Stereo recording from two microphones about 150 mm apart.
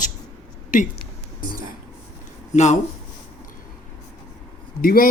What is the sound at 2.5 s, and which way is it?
Speech, 50° left (ahead or behind).